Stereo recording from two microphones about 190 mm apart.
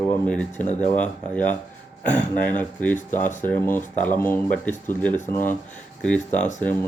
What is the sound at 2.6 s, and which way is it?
Speech, 10° left (ahead or behind).